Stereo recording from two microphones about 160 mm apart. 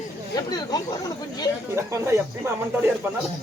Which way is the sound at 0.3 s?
25° left (ahead or behind).